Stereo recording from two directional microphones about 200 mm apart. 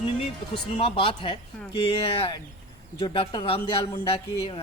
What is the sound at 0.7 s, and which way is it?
Speech, 25° left (ahead or behind).